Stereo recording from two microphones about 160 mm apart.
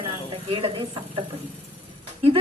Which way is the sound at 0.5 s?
30° right (ahead or behind).